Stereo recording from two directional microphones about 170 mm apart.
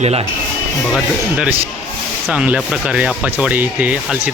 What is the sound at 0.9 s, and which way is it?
Speech, centre (ahead or behind).